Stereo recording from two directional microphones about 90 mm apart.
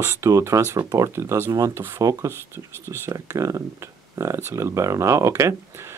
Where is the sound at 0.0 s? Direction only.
30° right (ahead or behind).